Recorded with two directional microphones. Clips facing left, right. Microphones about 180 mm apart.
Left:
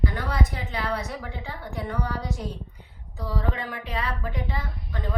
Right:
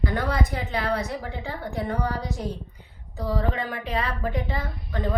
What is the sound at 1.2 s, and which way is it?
Speech, 35° right (ahead or behind).